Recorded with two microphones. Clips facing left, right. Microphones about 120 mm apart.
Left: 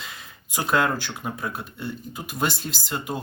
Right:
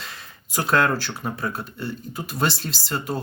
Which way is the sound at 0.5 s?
15° left (ahead or behind).